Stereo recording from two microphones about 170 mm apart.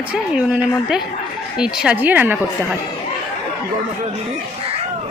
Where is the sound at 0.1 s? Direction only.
5° right (ahead or behind).